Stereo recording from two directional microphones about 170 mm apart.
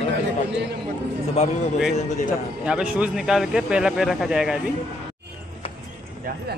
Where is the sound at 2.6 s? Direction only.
5° right (ahead or behind).